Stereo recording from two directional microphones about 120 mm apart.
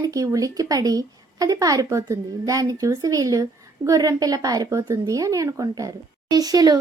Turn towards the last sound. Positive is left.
turn(degrees=-30)  # may be behind; listen again after turning